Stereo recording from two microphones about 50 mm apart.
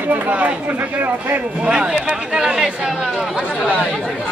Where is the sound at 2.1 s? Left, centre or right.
Centre.